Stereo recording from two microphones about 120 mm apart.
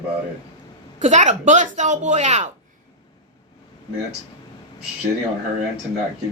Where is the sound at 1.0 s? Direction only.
85° right.